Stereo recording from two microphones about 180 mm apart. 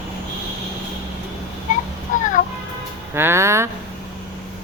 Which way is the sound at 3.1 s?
15° right (ahead or behind).